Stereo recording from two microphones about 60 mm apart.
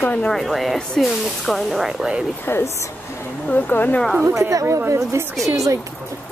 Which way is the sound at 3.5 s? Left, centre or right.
Left.